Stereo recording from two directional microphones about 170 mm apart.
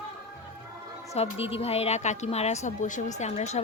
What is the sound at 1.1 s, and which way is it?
A woman's voice, 35° left (ahead or behind).